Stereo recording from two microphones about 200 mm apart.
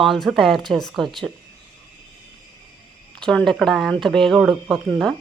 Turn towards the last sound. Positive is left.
turn(degrees=0)  # may be behind; listen again after turning